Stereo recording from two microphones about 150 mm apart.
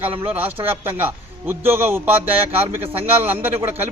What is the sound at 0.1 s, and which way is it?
Speech, 40° right (ahead or behind).